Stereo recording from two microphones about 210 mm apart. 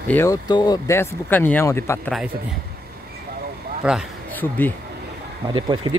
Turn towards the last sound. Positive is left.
turn(degrees=-20)  # may be behind; listen again after turning